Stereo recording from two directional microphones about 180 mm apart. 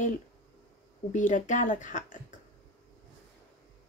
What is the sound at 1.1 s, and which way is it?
Speech, 45° left (ahead or behind).